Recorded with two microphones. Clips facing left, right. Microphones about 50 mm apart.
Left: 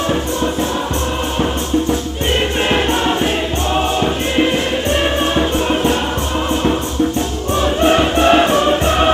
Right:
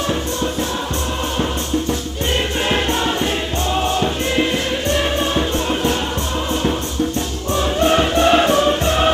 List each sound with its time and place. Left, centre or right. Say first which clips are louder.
2.7 s music: left 3 dB; left
5.3 s music: left 3 dB; left
7.8 s music: left 2 dB; centre